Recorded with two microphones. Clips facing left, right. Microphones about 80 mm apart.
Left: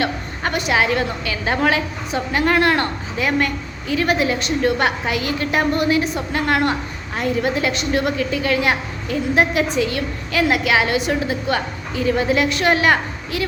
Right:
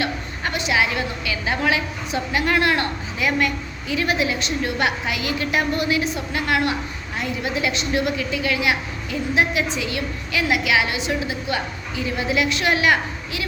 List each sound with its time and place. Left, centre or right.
0.0 s a woman's voice: left